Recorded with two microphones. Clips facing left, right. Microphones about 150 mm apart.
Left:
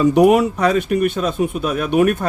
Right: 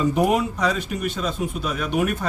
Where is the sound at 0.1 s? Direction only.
70° left (ahead or behind).